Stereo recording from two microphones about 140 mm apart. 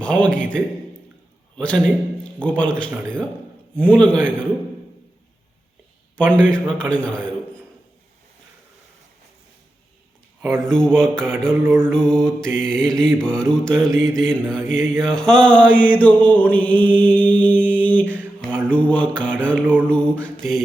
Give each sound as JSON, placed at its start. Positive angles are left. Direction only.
{"t": 0.0, "sound": "mantra", "side_deg": 5}
{"t": 6.1, "sound": "mantra", "side_deg": 10}
{"t": 10.6, "sound": "mantra", "side_deg": 5}
{"t": 11.6, "sound": "mantra", "side_deg": -15}
{"t": 11.9, "sound": "mantra", "side_deg": 5}
{"t": 18.0, "sound": "mantra", "side_deg": -10}
{"t": 18.3, "sound": "mantra", "side_deg": 10}
{"t": 19.6, "sound": "mantra", "side_deg": -10}
{"t": 19.9, "sound": "mantra", "side_deg": 10}